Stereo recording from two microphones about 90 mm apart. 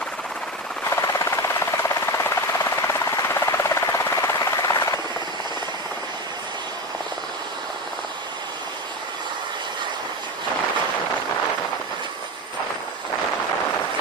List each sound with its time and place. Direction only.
0.8 s helicopter: 35° left (ahead or behind)